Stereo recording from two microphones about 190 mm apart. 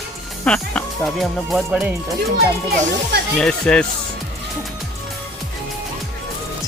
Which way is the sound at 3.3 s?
5° left (ahead or behind).